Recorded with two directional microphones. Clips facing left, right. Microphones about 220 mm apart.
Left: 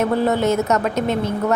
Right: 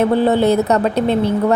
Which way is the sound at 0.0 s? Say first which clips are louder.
Right 4 dB; 30° right (ahead or behind).